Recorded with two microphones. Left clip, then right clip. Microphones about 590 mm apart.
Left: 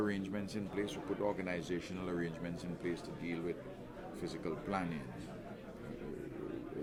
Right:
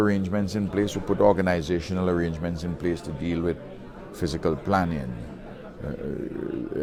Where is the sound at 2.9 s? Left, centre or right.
Right.